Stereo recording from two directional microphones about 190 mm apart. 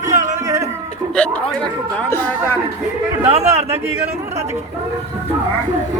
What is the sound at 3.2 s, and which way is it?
Speech, 30° right (ahead or behind).